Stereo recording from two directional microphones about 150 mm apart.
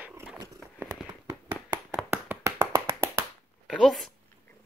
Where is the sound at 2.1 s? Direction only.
15° right (ahead or behind).